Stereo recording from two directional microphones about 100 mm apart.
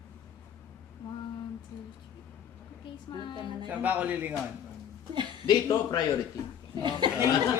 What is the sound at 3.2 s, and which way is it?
Speech, 50° left (ahead or behind).